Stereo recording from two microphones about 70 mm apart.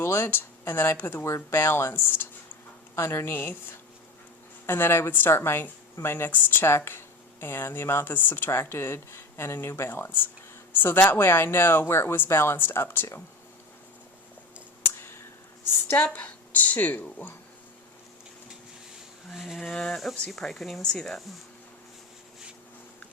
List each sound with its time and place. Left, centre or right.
0.0 s a woman's voice: left
14.8 s a sound: left
16.0 s a woman's voice: left
19.3 s speech: centre
19.7 s speech: centre